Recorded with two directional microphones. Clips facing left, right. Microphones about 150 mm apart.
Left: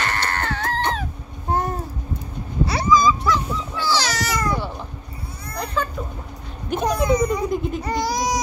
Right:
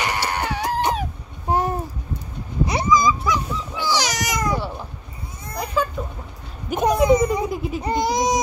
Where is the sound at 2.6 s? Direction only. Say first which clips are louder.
Left 1 dB; 15° right (ahead or behind).